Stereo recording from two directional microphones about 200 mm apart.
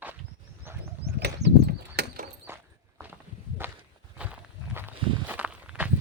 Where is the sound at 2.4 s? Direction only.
10° right (ahead or behind).